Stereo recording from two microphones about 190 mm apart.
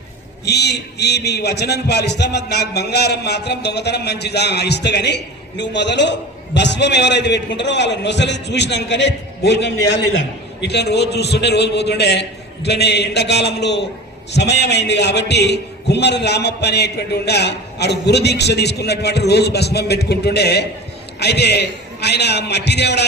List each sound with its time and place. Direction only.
0.4 s a man's voice: 60° left (ahead or behind)